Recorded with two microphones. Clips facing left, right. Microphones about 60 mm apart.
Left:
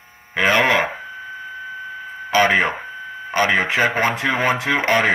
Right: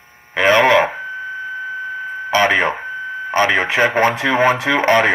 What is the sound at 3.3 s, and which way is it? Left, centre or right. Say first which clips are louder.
Speech: right 2 dB; right.